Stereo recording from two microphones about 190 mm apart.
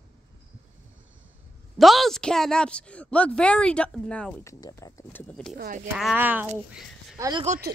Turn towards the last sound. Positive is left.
turn(degrees=-20)  # may be behind; listen again after turning